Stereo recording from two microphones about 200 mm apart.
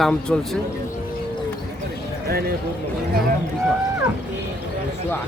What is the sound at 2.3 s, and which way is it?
Speech, 50° right (ahead or behind).